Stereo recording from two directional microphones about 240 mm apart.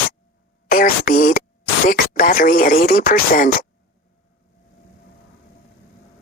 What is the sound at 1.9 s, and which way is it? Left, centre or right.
Speech, left.